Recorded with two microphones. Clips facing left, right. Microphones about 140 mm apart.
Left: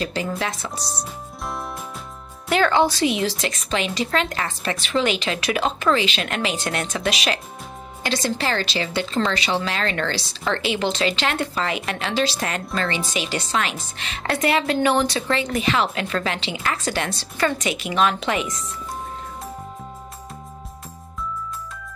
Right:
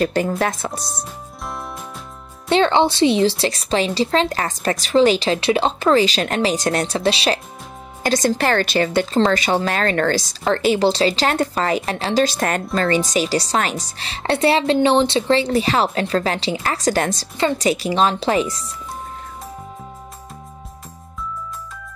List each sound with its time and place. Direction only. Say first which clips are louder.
0.0 s a woman's voice: right 6 dB; 50° right (ahead or behind)
1.0 s music: even; centre (ahead or behind)
2.5 s a woman's voice: right 3 dB; 25° right (ahead or behind)
8.0 s a woman's voice: right 6 dB; 45° right (ahead or behind)